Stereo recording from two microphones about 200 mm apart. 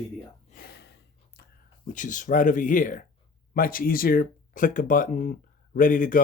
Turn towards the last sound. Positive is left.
turn(degrees=45)  # may be behind; listen again after turning